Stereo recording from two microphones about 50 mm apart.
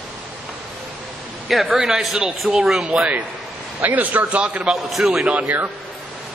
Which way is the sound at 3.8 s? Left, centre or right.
Right.